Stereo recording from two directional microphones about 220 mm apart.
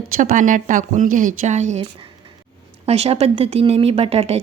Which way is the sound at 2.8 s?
30° right (ahead or behind).